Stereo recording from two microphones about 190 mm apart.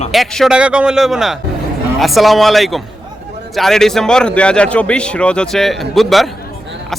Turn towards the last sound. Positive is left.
turn(degrees=0)  # may be behind; listen again after turning